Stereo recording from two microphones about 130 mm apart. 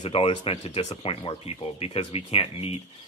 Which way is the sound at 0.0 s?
45° left (ahead or behind).